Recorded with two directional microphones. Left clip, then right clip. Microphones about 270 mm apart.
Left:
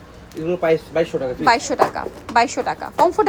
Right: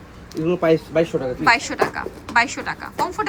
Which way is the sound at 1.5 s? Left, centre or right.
Centre.